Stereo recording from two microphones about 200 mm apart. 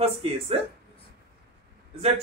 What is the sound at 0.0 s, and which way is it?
Speech, 30° right (ahead or behind).